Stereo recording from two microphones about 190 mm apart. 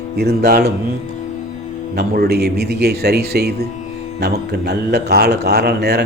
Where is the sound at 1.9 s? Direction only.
55° right (ahead or behind).